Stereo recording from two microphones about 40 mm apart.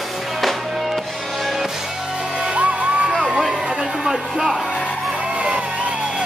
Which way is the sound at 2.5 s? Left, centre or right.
Right.